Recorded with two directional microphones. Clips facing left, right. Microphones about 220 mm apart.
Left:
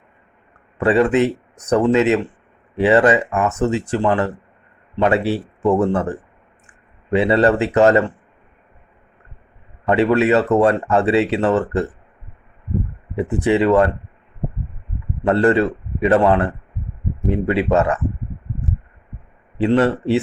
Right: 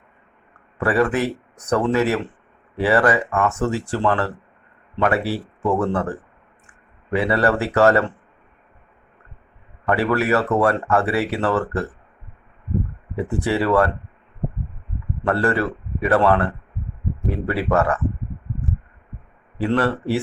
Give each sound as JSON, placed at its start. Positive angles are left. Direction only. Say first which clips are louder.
{"t": 0.8, "sound": "speech", "louder": "left 4 dB", "side_deg": 20}
{"t": 9.8, "sound": "speech", "louder": "left 5 dB", "side_deg": 20}
{"t": 13.1, "sound": "speech", "louder": "left 5 dB", "side_deg": 20}
{"t": 15.2, "sound": "speech", "louder": "left 5 dB", "side_deg": 20}
{"t": 19.5, "sound": "speech", "louder": "left 4 dB", "side_deg": 20}